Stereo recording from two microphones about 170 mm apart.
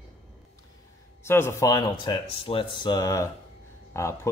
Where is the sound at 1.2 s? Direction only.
15° left (ahead or behind).